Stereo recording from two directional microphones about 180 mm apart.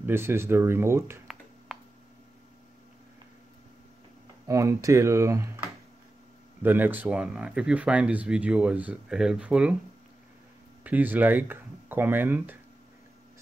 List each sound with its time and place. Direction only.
0.0 s speech: 15° right (ahead or behind)
1.2 s a sound: centre (ahead or behind)
4.5 s speech: 15° right (ahead or behind)
6.6 s speech: 10° right (ahead or behind)
10.8 s speech: 10° right (ahead or behind)